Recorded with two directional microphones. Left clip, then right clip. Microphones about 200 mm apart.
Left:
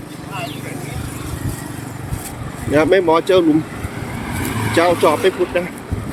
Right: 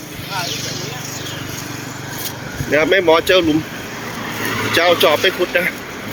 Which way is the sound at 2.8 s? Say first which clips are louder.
Even; 10° left (ahead or behind).